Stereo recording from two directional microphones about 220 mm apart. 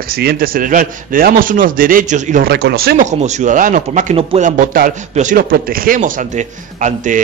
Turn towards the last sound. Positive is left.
turn(degrees=-35)  # may be behind; listen again after turning